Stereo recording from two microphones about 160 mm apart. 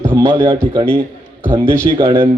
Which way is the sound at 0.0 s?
15° right (ahead or behind).